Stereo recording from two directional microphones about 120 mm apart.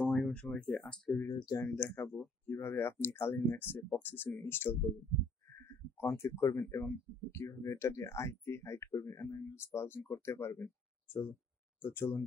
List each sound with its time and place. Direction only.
0.0 s speech: 10° left (ahead or behind)
1.2 s speech: 30° left (ahead or behind)
1.6 s speech: 15° left (ahead or behind)
5.9 s speech: 20° left (ahead or behind)